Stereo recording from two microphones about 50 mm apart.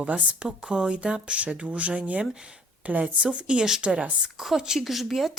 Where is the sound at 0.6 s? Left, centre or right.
Centre.